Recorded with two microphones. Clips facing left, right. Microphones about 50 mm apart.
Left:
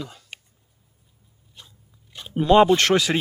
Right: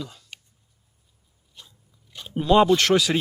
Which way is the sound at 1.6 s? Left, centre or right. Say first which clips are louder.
Left 1 dB; left.